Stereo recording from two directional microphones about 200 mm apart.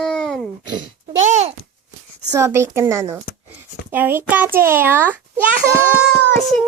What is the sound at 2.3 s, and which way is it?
A child's voice, 15° right (ahead or behind).